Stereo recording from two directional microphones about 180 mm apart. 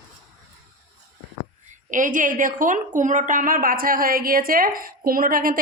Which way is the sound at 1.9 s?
45° right (ahead or behind).